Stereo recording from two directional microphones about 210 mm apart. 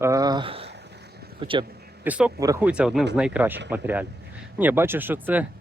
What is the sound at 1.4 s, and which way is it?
Speech, 25° right (ahead or behind).